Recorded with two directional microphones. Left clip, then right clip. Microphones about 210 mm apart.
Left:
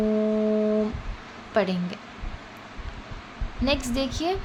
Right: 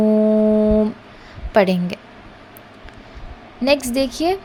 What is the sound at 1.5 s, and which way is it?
Speech, 35° right (ahead or behind).